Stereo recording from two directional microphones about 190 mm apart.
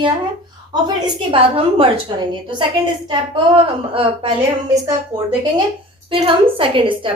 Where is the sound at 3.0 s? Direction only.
25° right (ahead or behind).